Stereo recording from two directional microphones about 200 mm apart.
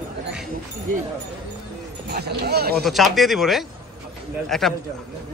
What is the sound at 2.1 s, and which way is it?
Speech, 55° right (ahead or behind).